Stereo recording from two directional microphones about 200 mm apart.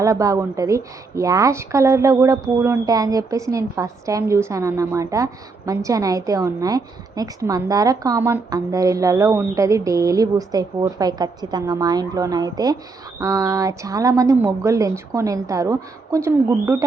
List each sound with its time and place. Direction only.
0.0 s a woman's voice: 15° right (ahead or behind)